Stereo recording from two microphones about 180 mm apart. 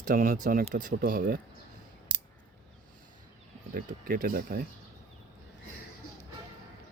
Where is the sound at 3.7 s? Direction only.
50° right (ahead or behind).